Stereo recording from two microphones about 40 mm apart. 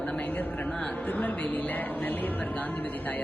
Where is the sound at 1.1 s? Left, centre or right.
Left.